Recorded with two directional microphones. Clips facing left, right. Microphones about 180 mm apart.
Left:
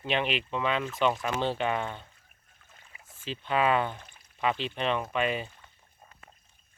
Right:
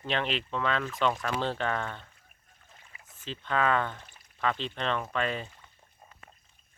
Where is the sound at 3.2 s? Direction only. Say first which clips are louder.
Left 2 dB; 15° left (ahead or behind).